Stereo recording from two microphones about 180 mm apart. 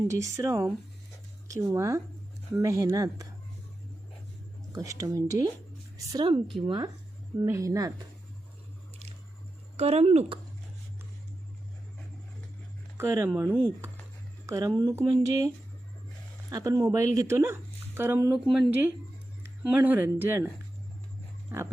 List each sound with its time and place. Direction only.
0.0 s speech: 15° right (ahead or behind)
4.7 s speech: 20° right (ahead or behind)
9.7 s speech: 35° right (ahead or behind)
13.0 s speech: 15° right (ahead or behind)
21.5 s dog: 10° right (ahead or behind)